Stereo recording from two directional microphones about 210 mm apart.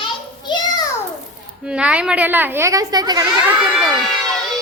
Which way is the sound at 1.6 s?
5° right (ahead or behind).